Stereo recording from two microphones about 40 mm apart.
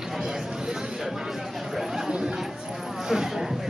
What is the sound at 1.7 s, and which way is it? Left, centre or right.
Chatter, centre.